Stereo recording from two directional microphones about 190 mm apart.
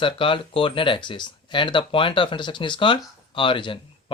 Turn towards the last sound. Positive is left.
turn(degrees=25)  # may be behind; listen again after turning